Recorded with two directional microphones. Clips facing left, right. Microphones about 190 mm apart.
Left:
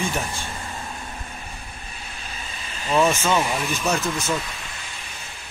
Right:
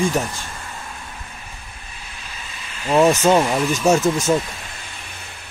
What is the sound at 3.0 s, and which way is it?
Speech, 35° right (ahead or behind).